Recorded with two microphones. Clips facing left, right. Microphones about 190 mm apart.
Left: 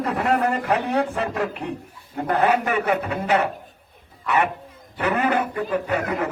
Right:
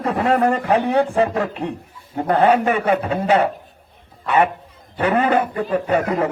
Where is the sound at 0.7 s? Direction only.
30° right (ahead or behind).